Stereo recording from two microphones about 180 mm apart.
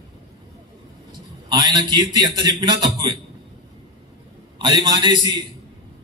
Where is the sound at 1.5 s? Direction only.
25° right (ahead or behind).